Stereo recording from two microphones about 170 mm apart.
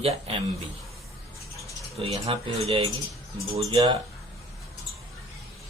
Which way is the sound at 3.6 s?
25° right (ahead or behind).